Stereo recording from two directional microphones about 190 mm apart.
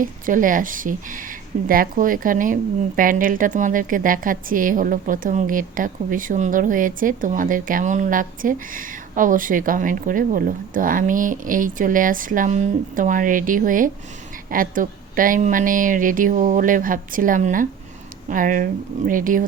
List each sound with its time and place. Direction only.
0.0 s speech: 45° right (ahead or behind)